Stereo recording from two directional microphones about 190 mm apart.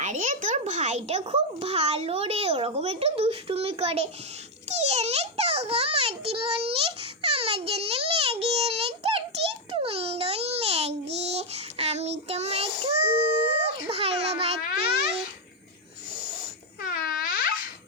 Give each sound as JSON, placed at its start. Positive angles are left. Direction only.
{"t": 0.0, "sound": "a child's voice", "side_deg": -40}
{"t": 4.7, "sound": "a sound", "side_deg": -35}
{"t": 9.7, "sound": "babbling", "side_deg": -30}
{"t": 11.1, "sound": "child singing", "side_deg": -35}
{"t": 16.8, "sound": "music", "side_deg": 50}